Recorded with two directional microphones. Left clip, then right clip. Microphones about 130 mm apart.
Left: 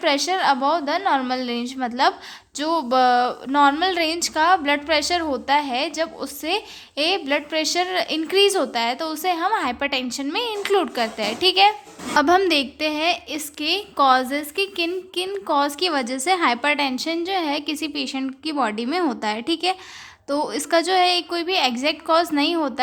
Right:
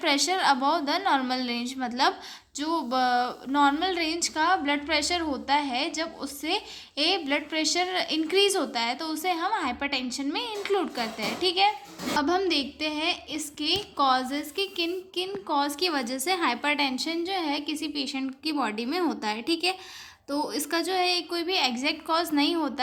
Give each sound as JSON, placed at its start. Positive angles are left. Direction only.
{"t": 0.0, "sound": "a woman's voice", "side_deg": 35}